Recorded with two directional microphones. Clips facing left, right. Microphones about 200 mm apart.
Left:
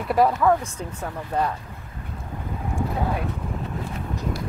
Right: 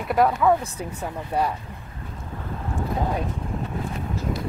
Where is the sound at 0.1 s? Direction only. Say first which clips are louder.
Even; centre (ahead or behind).